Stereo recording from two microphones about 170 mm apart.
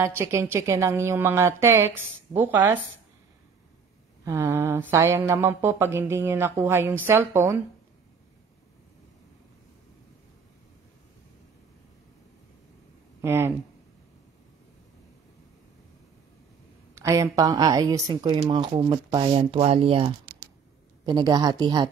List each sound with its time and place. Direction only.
0.0 s speech: 15° right (ahead or behind)
4.2 s speech: 15° right (ahead or behind)
13.2 s speech: 15° right (ahead or behind)
16.9 s speech: 15° right (ahead or behind)